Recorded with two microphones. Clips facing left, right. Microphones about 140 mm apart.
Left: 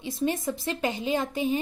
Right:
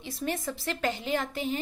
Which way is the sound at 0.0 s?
20° left (ahead or behind).